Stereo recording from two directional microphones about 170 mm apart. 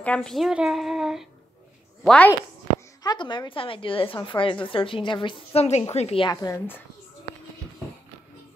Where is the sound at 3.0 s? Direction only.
30° left (ahead or behind).